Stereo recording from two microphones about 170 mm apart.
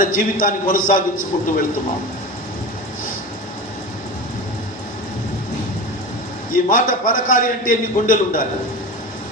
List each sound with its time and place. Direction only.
0.0 s a man's voice: 55° left (ahead or behind)
6.5 s a man's voice: 55° left (ahead or behind)